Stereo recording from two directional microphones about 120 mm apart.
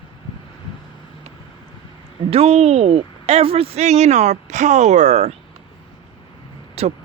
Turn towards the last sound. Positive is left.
turn(degrees=-60)  # may be behind; listen again after turning